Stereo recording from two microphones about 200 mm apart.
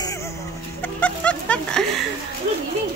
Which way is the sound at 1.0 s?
5° left (ahead or behind).